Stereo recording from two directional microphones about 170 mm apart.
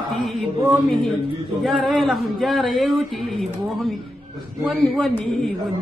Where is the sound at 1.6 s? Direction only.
Centre (ahead or behind).